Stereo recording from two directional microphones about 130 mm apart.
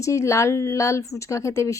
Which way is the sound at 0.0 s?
25° left (ahead or behind).